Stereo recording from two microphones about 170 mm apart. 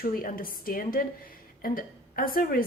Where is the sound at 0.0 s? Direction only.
60° left (ahead or behind).